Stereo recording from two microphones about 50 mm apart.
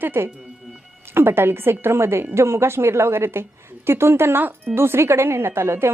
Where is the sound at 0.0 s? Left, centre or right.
Right.